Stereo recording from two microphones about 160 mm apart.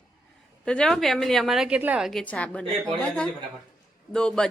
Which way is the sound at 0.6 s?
5° left (ahead or behind).